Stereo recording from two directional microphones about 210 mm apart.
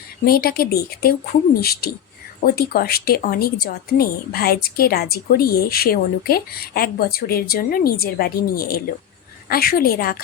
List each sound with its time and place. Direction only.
0.3 s speech: 45° left (ahead or behind)